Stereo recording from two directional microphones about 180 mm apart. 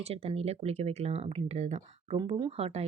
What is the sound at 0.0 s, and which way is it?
Speech, 35° right (ahead or behind).